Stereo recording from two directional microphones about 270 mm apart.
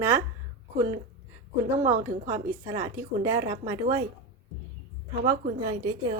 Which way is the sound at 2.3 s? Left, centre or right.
Centre.